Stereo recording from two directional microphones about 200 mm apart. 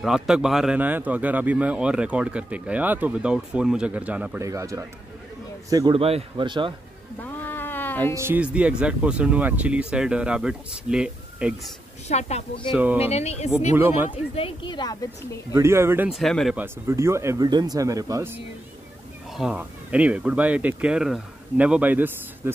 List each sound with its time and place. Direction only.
0.0 s a man's voice: centre (ahead or behind); by 6.7 s 25° right (ahead or behind)
7.2 s a sound: 10° left (ahead or behind)
8.1 s speech: 10° right (ahead or behind)
12.1 s a woman's voice: 35° left (ahead or behind)
12.7 s a man's voice: 10° right (ahead or behind)
13.0 s a woman's voice: 30° left (ahead or behind)
13.7 s a man's voice: 10° right (ahead or behind)
14.3 s speech: 25° left (ahead or behind)
15.5 s a man's voice: 15° right (ahead or behind)
16.1 s speech: centre (ahead or behind)
16.5 s a man's voice: 10° right (ahead or behind)